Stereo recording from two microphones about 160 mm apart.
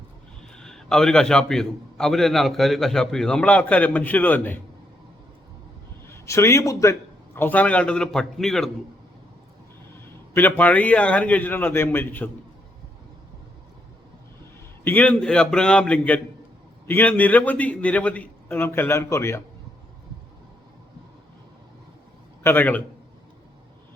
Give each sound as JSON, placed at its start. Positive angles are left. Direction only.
{"t": 0.4, "sound": "a man's voice", "side_deg": 5}
{"t": 6.1, "sound": "a man's voice", "side_deg": 15}
{"t": 10.3, "sound": "a man's voice", "side_deg": 10}
{"t": 14.8, "sound": "a man's voice", "side_deg": 10}
{"t": 22.4, "sound": "a man's voice", "side_deg": 10}